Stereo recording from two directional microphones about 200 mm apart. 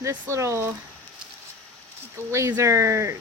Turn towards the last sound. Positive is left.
turn(degrees=-15)  # may be behind; listen again after turning